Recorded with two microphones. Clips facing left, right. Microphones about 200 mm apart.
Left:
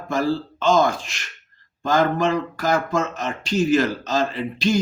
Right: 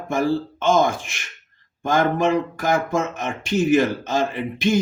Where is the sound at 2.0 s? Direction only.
20° right (ahead or behind).